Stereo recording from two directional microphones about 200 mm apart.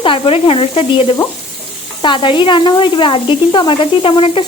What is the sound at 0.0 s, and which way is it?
Speech, 25° left (ahead or behind).